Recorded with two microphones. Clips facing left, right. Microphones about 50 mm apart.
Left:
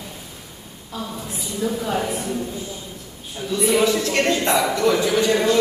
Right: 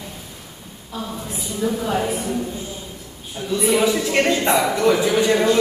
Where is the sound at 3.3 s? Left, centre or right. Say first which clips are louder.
Right 1 dB; centre.